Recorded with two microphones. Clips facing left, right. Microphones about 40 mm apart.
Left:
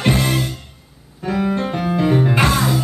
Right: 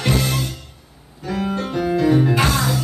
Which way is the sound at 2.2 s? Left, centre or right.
Left.